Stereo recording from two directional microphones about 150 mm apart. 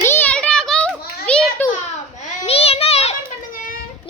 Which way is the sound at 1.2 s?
10° left (ahead or behind).